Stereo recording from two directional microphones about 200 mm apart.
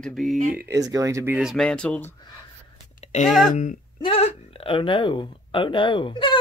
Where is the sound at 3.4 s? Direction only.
40° left (ahead or behind).